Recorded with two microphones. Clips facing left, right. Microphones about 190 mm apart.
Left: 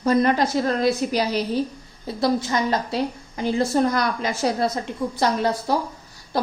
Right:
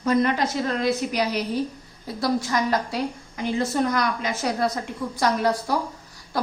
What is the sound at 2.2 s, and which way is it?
A woman's voice, 25° left (ahead or behind).